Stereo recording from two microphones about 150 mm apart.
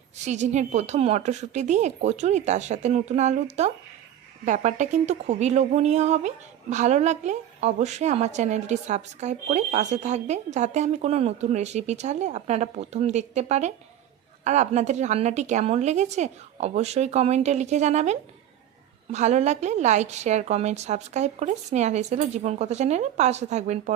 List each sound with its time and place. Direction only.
0.2 s a woman's voice: 50° right (ahead or behind)